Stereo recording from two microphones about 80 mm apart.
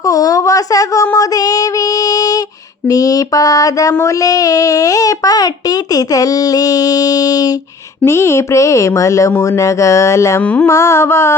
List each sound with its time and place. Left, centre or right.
0.0 s child singing: left
8.0 s speech: left
10.4 s carnatic music: centre
10.7 s speech: left